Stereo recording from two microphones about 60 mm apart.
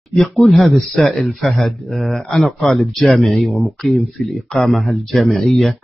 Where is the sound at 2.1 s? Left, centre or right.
Centre.